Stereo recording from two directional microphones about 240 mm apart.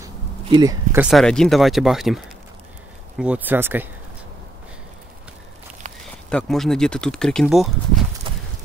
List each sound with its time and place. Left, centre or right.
0.5 s speech: centre
1.0 s speech: centre
6.3 s speech: centre
8.3 s clip-clop: right